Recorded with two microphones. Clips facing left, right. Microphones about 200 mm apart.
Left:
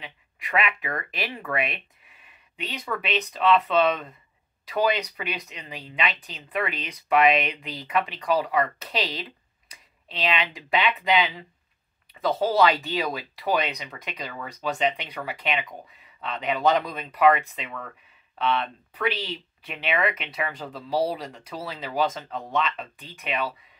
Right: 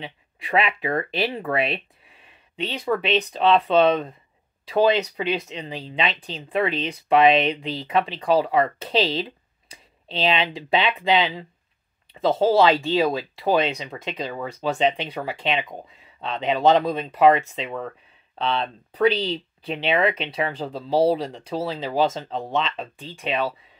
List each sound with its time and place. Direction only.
0.0 s speech: 30° right (ahead or behind)